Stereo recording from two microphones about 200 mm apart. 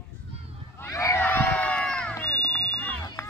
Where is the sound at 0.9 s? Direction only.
15° left (ahead or behind).